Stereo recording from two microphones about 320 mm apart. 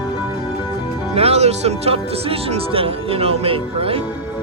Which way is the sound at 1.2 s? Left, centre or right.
Centre.